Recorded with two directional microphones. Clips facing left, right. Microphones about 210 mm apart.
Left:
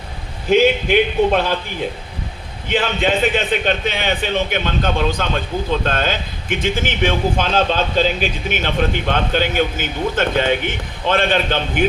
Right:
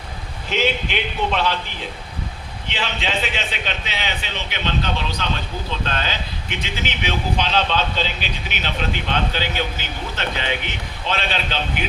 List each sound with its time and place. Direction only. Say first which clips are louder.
0.5 s a man's voice: left 9 dB; 50° left (ahead or behind)
2.6 s a man's voice: left 9 dB; 50° left (ahead or behind)